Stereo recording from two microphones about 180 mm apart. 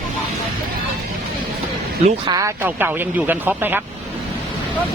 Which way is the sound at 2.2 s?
20° right (ahead or behind).